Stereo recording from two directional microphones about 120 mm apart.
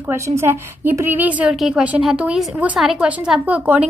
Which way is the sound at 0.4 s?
20° right (ahead or behind).